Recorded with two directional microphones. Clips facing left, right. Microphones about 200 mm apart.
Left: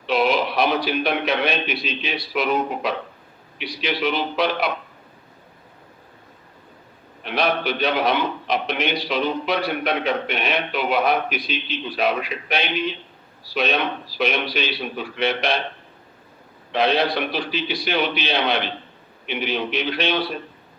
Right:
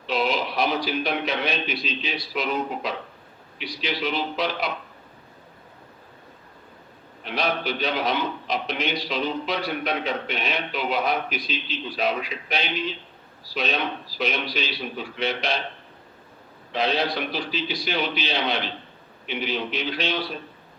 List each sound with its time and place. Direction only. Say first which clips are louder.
0.0 s a man's voice: left 5 dB; 65° left (ahead or behind)
7.3 s a man's voice: left 4 dB; 65° left (ahead or behind)
16.7 s a man's voice: left 4 dB; 65° left (ahead or behind)